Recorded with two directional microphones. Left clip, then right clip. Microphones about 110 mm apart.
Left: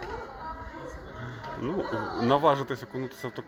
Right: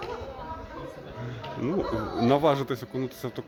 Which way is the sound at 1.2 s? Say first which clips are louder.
Right 2 dB; 35° right (ahead or behind).